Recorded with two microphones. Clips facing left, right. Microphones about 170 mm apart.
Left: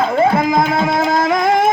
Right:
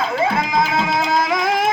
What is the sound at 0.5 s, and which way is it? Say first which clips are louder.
Music: left 4 dB; 50° left (ahead or behind).